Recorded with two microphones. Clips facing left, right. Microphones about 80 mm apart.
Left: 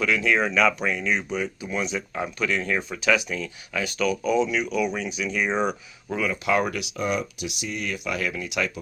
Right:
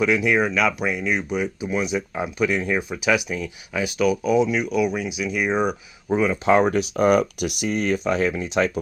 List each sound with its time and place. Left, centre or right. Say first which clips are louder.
0.0 s speech: right 3 dB; centre
6.1 s speech: right 6 dB; right